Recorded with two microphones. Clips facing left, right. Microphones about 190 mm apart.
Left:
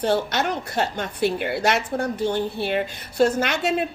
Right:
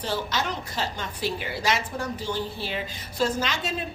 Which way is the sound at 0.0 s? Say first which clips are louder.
Left 7 dB; 60° left (ahead or behind).